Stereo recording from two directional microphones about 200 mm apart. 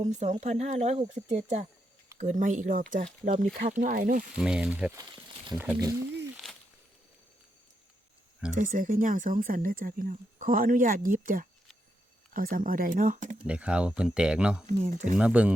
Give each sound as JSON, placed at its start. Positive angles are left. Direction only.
{"t": 0.0, "sound": "speech", "side_deg": -35}
{"t": 4.4, "sound": "speech", "side_deg": -5}
{"t": 4.9, "sound": "a sound", "side_deg": -20}
{"t": 6.3, "sound": "a sound", "side_deg": 0}
{"t": 8.5, "sound": "speech", "side_deg": -40}
{"t": 13.4, "sound": "speech", "side_deg": -5}
{"t": 14.7, "sound": "speech", "side_deg": -35}
{"t": 15.1, "sound": "speech", "side_deg": -5}